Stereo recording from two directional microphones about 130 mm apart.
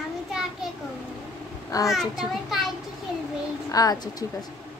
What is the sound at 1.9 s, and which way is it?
Speech, centre (ahead or behind).